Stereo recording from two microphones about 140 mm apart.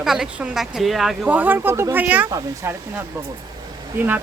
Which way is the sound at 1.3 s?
15° right (ahead or behind).